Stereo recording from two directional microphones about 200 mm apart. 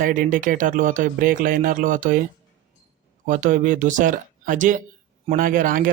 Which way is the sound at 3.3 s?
40° right (ahead or behind).